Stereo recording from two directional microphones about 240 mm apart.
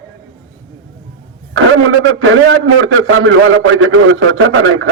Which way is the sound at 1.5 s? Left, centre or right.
Right.